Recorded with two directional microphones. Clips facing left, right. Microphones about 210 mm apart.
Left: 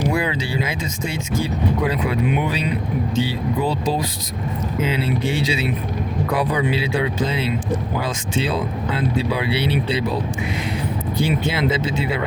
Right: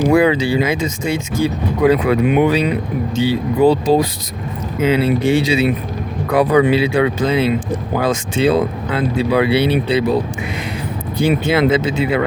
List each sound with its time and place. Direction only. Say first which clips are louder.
0.1 s speech: right 9 dB; 75° right (ahead or behind)
1.8 s speech: right 13 dB; 70° right (ahead or behind)
3.2 s speech: right 9 dB; 65° right (ahead or behind)
11.3 s speech: right 9 dB; 55° right (ahead or behind)